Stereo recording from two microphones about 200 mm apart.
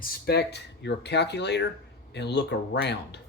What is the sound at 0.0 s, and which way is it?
Speech, 55° left (ahead or behind).